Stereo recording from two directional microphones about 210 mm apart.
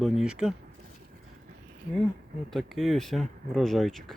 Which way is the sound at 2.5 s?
Centre (ahead or behind).